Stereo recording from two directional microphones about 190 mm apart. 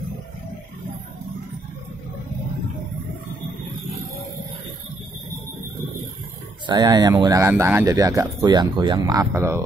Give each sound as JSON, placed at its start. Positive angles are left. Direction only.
{"t": 6.6, "sound": "speech", "side_deg": -25}